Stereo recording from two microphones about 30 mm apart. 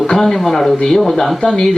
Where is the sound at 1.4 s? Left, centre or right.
Centre.